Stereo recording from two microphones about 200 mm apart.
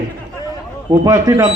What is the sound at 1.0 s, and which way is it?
Speech, 15° right (ahead or behind).